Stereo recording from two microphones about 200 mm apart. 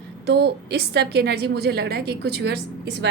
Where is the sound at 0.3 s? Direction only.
55° right (ahead or behind).